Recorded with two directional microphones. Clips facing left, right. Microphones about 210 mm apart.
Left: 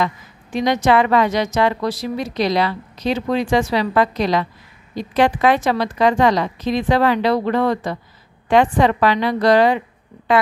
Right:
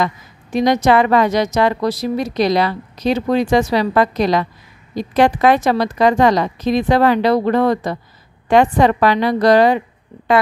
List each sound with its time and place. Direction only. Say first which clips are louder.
0.0 s a woman's voice: right 2 dB; 40° right (ahead or behind)